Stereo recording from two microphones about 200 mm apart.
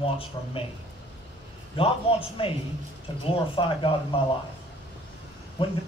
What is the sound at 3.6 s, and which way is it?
Speech, 25° left (ahead or behind).